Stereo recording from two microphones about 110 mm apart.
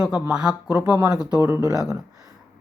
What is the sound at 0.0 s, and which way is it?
Speech, 5° right (ahead or behind).